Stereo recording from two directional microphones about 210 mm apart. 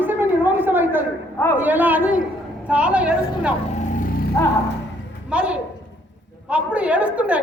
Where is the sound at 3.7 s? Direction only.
35° left (ahead or behind).